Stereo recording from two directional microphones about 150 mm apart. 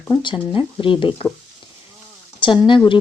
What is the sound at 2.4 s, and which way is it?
Speech, 35° left (ahead or behind).